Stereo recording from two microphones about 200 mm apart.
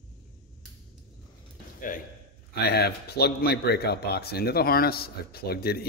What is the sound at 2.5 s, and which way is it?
Speech, 55° left (ahead or behind).